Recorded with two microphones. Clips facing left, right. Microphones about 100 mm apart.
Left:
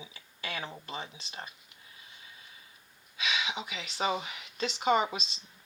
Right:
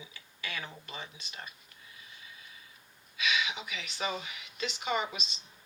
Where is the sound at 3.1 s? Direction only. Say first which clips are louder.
Right 1 dB; 30° left (ahead or behind).